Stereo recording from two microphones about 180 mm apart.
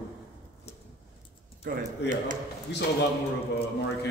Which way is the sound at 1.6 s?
45° right (ahead or behind).